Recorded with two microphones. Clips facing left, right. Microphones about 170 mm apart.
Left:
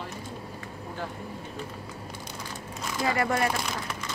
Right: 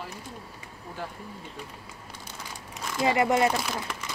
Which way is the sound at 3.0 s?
20° right (ahead or behind).